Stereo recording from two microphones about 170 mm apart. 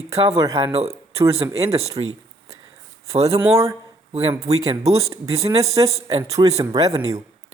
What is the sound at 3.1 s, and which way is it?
Speech, 40° right (ahead or behind).